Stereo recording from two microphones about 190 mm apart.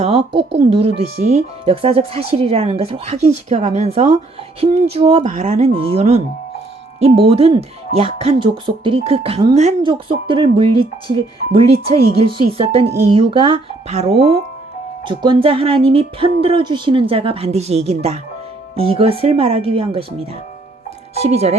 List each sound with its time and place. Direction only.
0.0 s speech: 30° right (ahead or behind)